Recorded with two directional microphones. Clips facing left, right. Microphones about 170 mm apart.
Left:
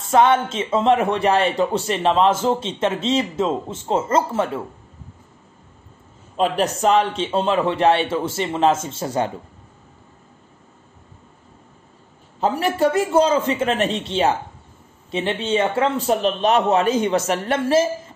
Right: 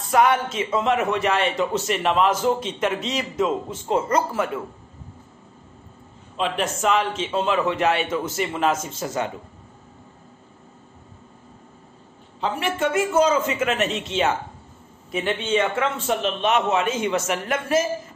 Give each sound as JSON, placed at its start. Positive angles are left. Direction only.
{"t": 0.0, "sound": "speech", "side_deg": 25}
{"t": 6.3, "sound": "a man's voice", "side_deg": 40}
{"t": 12.4, "sound": "a man's voice", "side_deg": 40}